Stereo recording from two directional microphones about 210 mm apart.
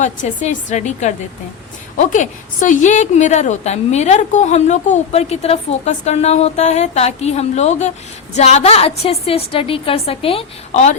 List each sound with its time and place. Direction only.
0.0 s a woman's voice: 35° left (ahead or behind)